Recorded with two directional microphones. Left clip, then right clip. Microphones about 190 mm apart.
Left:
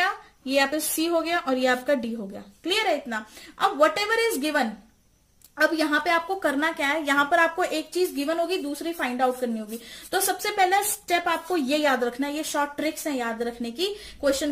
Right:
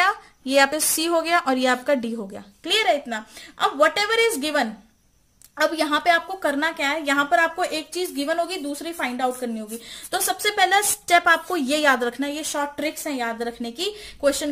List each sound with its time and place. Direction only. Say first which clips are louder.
0.0 s a woman's voice: right 5 dB; 40° right (ahead or behind)